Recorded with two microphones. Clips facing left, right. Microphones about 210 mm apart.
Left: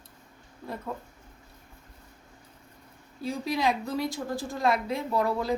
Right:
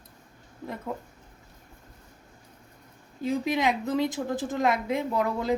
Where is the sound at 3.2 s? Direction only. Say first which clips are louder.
Right 2 dB; 20° right (ahead or behind).